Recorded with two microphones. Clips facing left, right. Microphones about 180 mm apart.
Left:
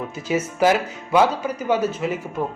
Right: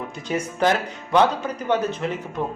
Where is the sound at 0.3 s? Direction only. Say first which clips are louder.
Left 3 dB; 5° left (ahead or behind).